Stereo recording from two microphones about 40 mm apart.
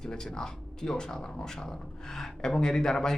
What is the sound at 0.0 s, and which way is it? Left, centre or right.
A man's voice, centre.